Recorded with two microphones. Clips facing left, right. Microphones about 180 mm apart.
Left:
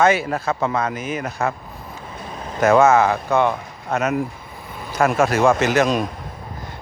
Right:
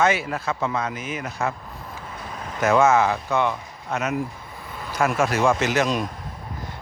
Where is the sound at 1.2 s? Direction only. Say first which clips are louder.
Left 2 dB; 60° left (ahead or behind).